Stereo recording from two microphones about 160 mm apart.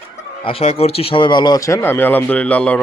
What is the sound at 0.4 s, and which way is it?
Speech, 35° left (ahead or behind).